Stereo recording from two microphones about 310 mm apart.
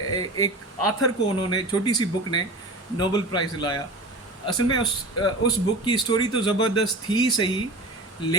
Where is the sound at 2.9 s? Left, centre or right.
Centre.